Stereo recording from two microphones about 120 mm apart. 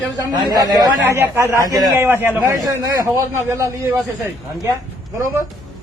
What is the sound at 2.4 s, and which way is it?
A man's voice, 30° right (ahead or behind).